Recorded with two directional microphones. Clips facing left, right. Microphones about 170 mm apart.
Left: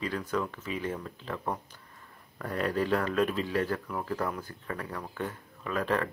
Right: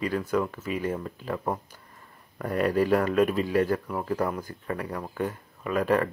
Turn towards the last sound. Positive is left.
turn(degrees=-10)  # may be behind; listen again after turning